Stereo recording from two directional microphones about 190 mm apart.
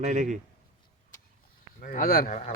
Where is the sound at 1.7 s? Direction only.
45° left (ahead or behind).